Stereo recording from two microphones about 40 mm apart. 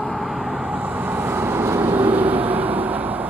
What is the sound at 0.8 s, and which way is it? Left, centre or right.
Vehicle, right.